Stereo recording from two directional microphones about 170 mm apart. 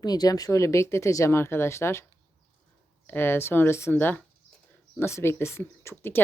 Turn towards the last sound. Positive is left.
turn(degrees=15)  # may be behind; listen again after turning